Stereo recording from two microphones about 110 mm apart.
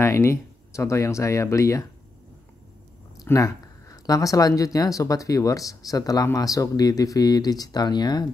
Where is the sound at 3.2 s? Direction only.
30° left (ahead or behind).